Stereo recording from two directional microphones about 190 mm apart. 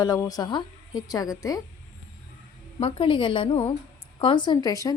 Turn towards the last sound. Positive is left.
turn(degrees=20)  # may be behind; listen again after turning